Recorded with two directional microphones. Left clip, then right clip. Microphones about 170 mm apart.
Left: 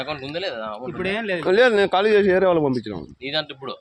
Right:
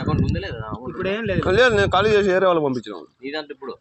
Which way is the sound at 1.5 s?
20° left (ahead or behind).